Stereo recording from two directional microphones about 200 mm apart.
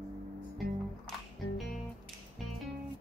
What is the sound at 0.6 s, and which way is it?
Music, 50° right (ahead or behind).